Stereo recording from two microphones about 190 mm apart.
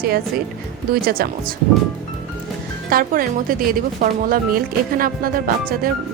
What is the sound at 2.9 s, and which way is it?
Speech, 50° right (ahead or behind).